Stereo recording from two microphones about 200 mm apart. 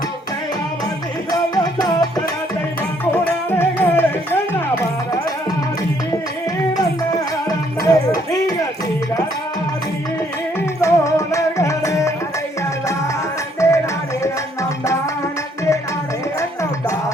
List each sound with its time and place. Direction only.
1.3 s music: 20° left (ahead or behind)
3.6 s music: 10° left (ahead or behind)
7.4 s music: 20° left (ahead or behind)
10.8 s music: 15° left (ahead or behind)
13.6 s music: 15° left (ahead or behind)
16.4 s music: 15° left (ahead or behind)